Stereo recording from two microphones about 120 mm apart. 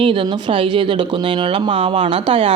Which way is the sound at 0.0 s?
45° right (ahead or behind).